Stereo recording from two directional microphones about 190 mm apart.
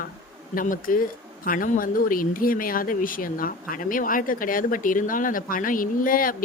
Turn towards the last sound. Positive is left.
turn(degrees=45)  # may be behind; listen again after turning